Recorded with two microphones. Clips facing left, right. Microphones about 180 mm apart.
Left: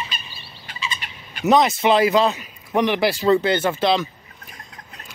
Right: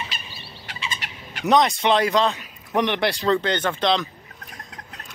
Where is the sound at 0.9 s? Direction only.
80° right.